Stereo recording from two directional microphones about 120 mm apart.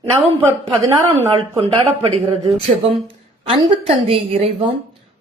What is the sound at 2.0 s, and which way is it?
Speech, 50° right (ahead or behind).